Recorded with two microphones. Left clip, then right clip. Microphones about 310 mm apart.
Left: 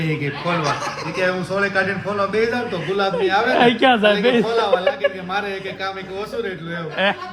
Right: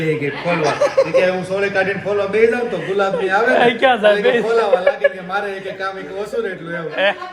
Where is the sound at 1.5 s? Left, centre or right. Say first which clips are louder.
Right 2 dB; left.